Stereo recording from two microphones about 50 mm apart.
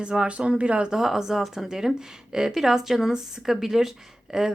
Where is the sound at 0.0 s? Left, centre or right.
Centre.